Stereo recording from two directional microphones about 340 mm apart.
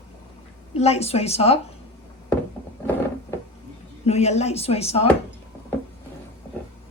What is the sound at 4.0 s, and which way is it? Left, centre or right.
A woman's voice, centre.